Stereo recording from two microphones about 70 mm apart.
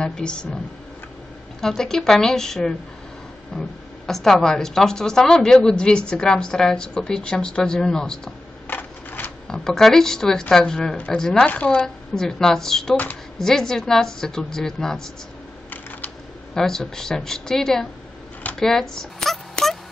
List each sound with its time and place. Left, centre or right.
0.0 s a woman's voice: centre
1.6 s a woman's voice: centre
8.6 s a sound: left
9.5 s a woman's voice: centre
12.9 s a woman's voice: left
13.4 s a woman's voice: centre
16.5 s a woman's voice: centre
18.6 s a sound: centre